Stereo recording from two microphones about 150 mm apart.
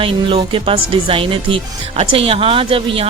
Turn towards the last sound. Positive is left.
turn(degrees=-35)  # may be behind; listen again after turning